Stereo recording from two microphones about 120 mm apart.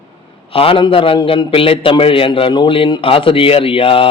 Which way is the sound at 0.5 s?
50° left (ahead or behind).